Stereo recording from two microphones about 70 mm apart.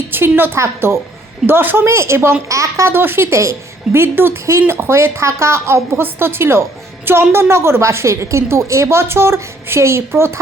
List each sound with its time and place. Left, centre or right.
0.1 s a woman's voice: right